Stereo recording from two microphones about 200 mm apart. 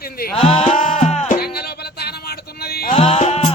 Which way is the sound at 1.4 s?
50° left (ahead or behind).